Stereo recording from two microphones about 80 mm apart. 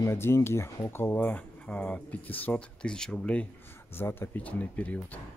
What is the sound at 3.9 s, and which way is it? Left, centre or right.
Speech, left.